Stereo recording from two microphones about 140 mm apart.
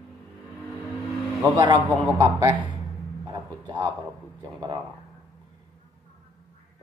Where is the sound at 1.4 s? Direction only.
30° right (ahead or behind).